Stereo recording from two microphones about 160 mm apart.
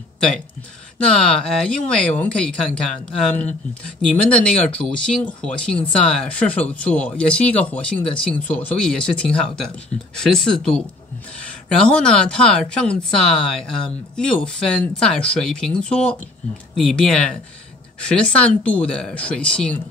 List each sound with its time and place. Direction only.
1.0 s speech: 5° left (ahead or behind)